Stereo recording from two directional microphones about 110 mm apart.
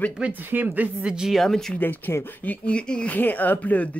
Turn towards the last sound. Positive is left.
turn(degrees=15)  # may be behind; listen again after turning